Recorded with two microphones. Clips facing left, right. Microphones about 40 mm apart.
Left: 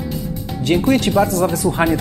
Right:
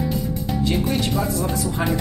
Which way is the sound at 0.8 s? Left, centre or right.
Left.